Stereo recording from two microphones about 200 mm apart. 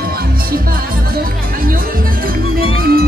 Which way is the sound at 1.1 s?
45° right (ahead or behind).